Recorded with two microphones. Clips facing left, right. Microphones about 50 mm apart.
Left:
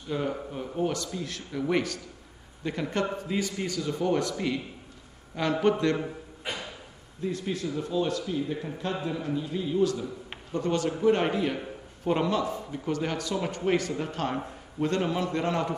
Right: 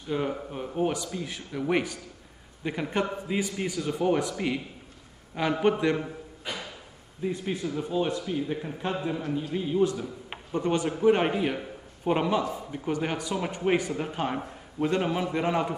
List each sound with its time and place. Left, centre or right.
0.1 s speech: centre
6.4 s a sound: left
7.2 s speech: centre